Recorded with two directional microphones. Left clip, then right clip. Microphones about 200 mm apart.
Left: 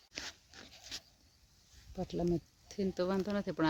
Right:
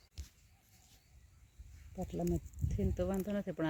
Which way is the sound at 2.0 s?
5° left (ahead or behind).